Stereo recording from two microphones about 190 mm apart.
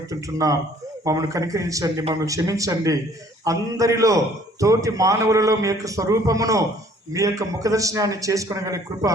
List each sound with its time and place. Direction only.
0.1 s a man's voice: 15° right (ahead or behind)